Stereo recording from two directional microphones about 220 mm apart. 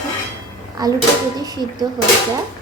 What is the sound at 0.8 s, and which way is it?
Speech, 15° right (ahead or behind).